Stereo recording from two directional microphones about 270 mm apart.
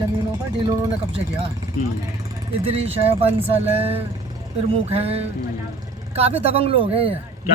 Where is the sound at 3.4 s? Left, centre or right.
Centre.